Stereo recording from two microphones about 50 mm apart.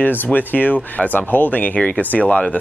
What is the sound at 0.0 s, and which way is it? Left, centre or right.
Speech, left.